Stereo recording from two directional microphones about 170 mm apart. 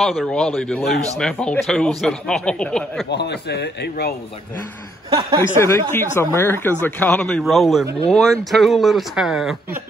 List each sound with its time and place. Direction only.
0.0 s speech: centre (ahead or behind)
3.1 s a man's voice: 80° left
5.6 s a man's voice: 15° left (ahead or behind); by 9.6 s centre (ahead or behind)